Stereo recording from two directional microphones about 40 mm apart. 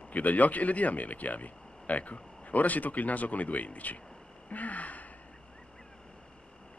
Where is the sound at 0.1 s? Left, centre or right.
Left.